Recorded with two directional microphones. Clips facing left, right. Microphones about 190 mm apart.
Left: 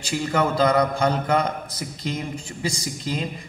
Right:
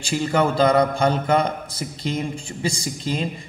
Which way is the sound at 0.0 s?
30° right (ahead or behind).